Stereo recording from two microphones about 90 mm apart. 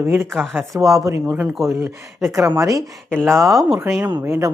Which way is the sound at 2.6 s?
40° right (ahead or behind).